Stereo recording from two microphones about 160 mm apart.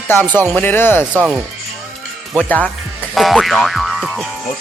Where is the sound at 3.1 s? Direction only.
Centre (ahead or behind).